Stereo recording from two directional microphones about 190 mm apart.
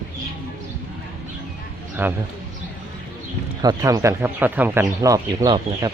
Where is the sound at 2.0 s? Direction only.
10° right (ahead or behind).